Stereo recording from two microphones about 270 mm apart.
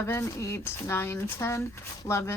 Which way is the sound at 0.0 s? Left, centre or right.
Centre.